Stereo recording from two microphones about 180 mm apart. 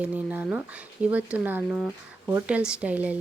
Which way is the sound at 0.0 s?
10° right (ahead or behind).